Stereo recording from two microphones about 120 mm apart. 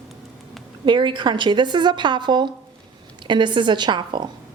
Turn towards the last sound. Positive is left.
turn(degrees=-40)  # may be behind; listen again after turning